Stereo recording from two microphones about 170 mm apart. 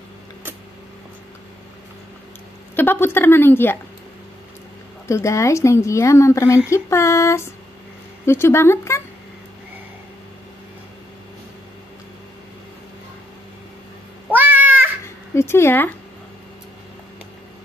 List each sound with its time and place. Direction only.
2.7 s speech: 10° left (ahead or behind)
5.0 s speech: 15° left (ahead or behind)
14.3 s cat: 10° right (ahead or behind)
15.3 s speech: 15° left (ahead or behind)